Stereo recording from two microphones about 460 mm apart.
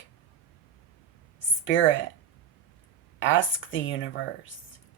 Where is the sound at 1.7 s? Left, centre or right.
Left.